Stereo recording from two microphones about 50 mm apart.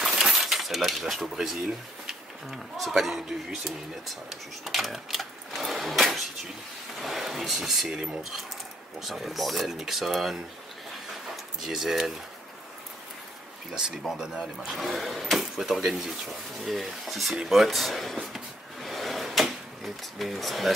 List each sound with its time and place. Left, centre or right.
0.0 s coin: centre
3.0 s speech: centre
7.9 s speech: centre
9.0 s speech: centre
11.6 s speech: centre
14.1 s speech: centre
18.3 s drawer open or close: centre